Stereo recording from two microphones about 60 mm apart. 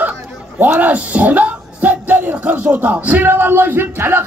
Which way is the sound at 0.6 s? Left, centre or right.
Right.